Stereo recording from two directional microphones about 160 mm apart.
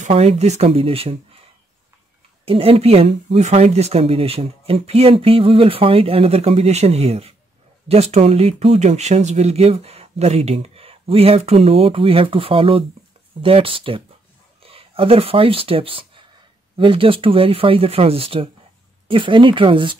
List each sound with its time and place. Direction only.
0.1 s speech: 40° right (ahead or behind)
2.4 s speech: 35° right (ahead or behind)